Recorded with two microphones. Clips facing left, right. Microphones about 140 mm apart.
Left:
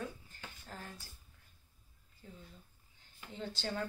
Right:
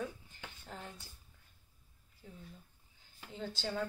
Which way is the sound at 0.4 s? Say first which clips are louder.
Right 2 dB; 20° right (ahead or behind).